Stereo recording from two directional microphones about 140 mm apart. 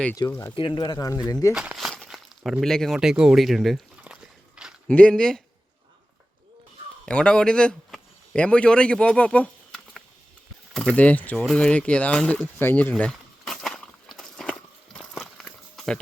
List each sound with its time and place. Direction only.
0.2 s speech: 20° left (ahead or behind)
0.5 s speech: 35° left (ahead or behind)
1.5 s crumpling: 5° right (ahead or behind)
4.9 s speech: 10° left (ahead or behind)
7.0 s speech: 5° left (ahead or behind)
11.4 s a sound: 10° left (ahead or behind)